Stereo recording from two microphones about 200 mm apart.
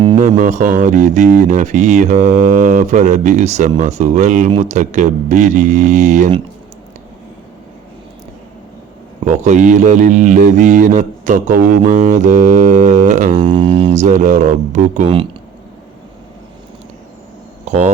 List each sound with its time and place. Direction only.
0.2 s speech: 40° right (ahead or behind)
9.2 s speech: 35° right (ahead or behind)
13.3 s speech: 25° right (ahead or behind)
15.0 s speech: 25° right (ahead or behind)
17.7 s speech: 30° right (ahead or behind)